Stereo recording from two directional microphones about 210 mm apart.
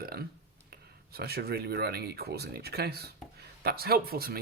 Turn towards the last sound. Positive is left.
turn(degrees=-45)  # may be behind; listen again after turning